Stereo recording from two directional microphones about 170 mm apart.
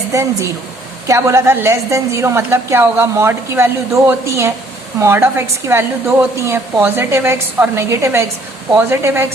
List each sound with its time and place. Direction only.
0.1 s a woman's voice: 20° right (ahead or behind)